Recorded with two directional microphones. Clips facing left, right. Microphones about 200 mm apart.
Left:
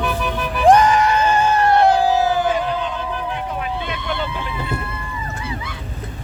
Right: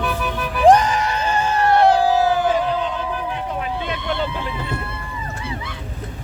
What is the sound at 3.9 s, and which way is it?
Vehicle, 30° right (ahead or behind).